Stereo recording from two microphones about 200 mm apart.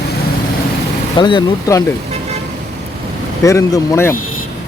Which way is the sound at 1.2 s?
20° left (ahead or behind).